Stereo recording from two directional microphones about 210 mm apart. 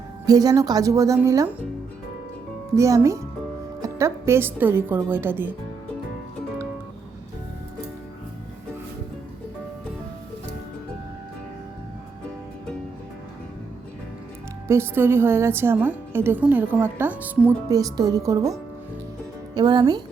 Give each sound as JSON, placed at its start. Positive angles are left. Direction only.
{"t": 0.3, "sound": "a woman's voice", "side_deg": -15}
{"t": 2.7, "sound": "a woman's voice", "side_deg": -15}
{"t": 14.7, "sound": "a woman's voice", "side_deg": -10}
{"t": 19.5, "sound": "speech", "side_deg": -20}